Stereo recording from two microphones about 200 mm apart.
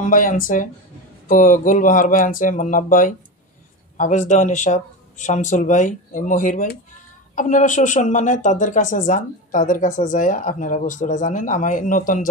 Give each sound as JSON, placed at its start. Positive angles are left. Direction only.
{"t": 0.1, "sound": "speech", "side_deg": 40}